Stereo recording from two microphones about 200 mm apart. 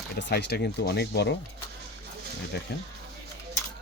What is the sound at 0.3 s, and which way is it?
Speech, 55° left (ahead or behind).